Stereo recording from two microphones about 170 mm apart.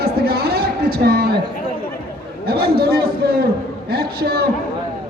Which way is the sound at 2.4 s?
65° right (ahead or behind).